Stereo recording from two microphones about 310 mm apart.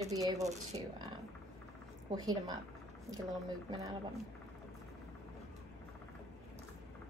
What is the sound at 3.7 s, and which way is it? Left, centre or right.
Speech, centre.